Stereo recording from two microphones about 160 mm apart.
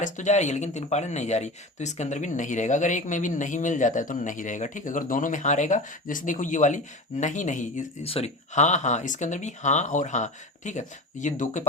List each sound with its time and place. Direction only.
0.0 s speech: 50° left (ahead or behind)
8.0 s speech: 40° left (ahead or behind)